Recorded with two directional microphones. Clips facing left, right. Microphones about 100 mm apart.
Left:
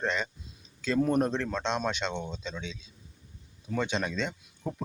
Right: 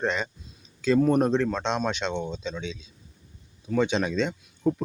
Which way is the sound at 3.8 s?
Centre (ahead or behind).